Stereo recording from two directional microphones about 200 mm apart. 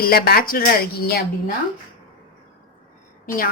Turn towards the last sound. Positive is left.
turn(degrees=45)  # may be behind; listen again after turning